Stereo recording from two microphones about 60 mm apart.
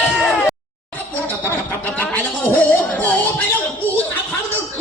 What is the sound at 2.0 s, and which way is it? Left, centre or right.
Speech, left.